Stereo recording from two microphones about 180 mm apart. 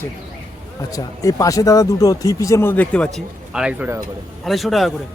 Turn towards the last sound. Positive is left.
turn(degrees=0)  # may be behind; listen again after turning